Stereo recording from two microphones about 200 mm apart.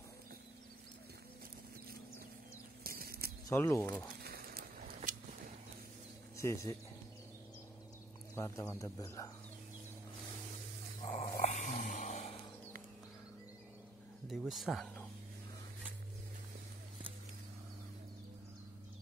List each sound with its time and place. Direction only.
2.8 s a sound: 50° right (ahead or behind)
3.4 s speech: 10° left (ahead or behind)
4.2 s a sound: 50° right (ahead or behind)
6.3 s speech: 15° left (ahead or behind)
8.4 s speech: 15° left (ahead or behind)
11.1 s dog: 40° left (ahead or behind)
14.3 s speech: centre (ahead or behind)